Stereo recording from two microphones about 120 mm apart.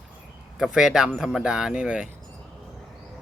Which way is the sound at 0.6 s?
5° right (ahead or behind).